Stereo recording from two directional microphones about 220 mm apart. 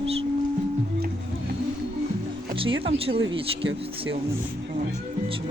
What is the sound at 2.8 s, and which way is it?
Speech, 25° right (ahead or behind).